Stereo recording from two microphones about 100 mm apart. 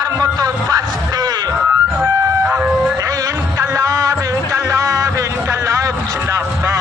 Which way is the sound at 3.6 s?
35° right (ahead or behind).